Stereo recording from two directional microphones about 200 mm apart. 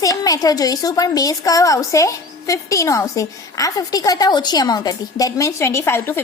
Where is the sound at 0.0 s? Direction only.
20° left (ahead or behind).